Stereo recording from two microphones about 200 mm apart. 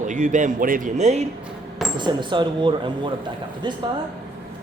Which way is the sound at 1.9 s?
25° right (ahead or behind).